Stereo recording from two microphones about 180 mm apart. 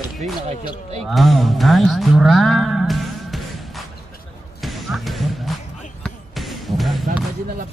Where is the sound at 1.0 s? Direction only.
Centre (ahead or behind).